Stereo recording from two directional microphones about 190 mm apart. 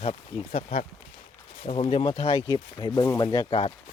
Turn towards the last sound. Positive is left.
turn(degrees=25)  # may be behind; listen again after turning